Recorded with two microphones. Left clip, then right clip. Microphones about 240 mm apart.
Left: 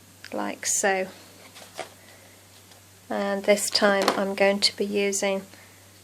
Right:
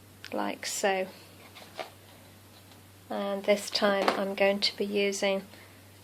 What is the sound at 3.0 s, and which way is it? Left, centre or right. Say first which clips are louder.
Speech: left 5 dB; centre.